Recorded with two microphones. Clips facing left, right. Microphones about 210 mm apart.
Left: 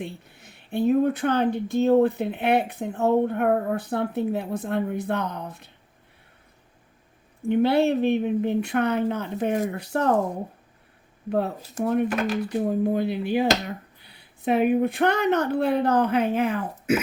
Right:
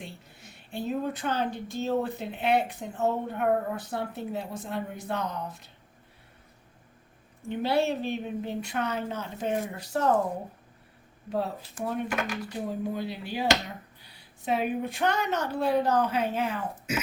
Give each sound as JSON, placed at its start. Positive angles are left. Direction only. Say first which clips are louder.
{"t": 0.0, "sound": "speech", "louder": "left 8 dB", "side_deg": 60}
{"t": 7.4, "sound": "speech", "louder": "left 7 dB", "side_deg": 60}
{"t": 11.3, "sound": "speech", "louder": "left 5 dB", "side_deg": 60}
{"t": 12.0, "sound": "speech", "louder": "left 7 dB", "side_deg": 35}
{"t": 12.5, "sound": "speech", "louder": "left 9 dB", "side_deg": 55}